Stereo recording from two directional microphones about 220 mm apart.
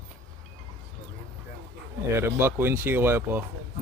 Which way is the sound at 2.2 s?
10° right (ahead or behind).